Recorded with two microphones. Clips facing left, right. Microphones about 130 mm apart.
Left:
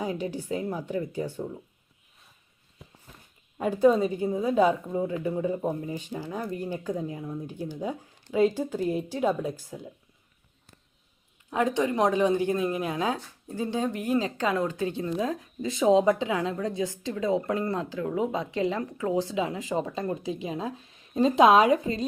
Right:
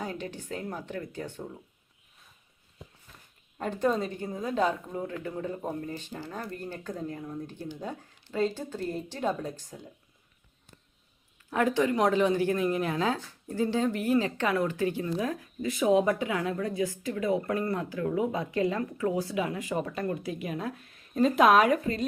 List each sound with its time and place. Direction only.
0.0 s a woman's voice: 10° left (ahead or behind)
3.6 s a woman's voice: 10° left (ahead or behind)
11.5 s a woman's voice: 20° left (ahead or behind)